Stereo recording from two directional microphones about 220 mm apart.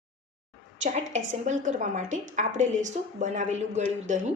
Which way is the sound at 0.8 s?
35° right (ahead or behind).